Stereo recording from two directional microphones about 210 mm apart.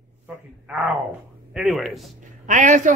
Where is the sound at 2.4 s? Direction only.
35° right (ahead or behind).